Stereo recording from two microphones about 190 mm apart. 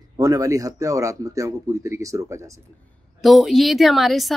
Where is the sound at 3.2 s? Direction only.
Centre (ahead or behind).